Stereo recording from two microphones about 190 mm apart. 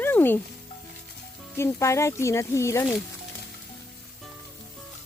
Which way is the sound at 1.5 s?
15° left (ahead or behind).